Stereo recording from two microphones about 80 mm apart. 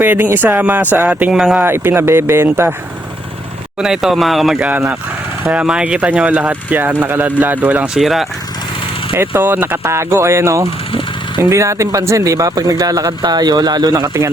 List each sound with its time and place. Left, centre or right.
0.0 s speech: right
1.3 s speech: centre
1.5 s speech: right
3.8 s speech: centre
5.5 s speech: centre
7.9 s speech: centre
9.1 s speech: right
9.8 s speech: right